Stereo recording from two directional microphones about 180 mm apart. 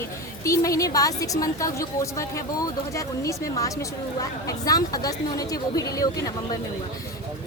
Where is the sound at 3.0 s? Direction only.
20° left (ahead or behind).